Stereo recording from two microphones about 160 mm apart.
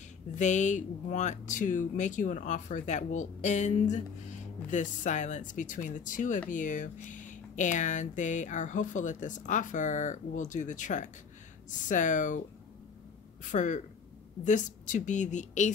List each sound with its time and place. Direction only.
0.4 s speech: 50° left (ahead or behind)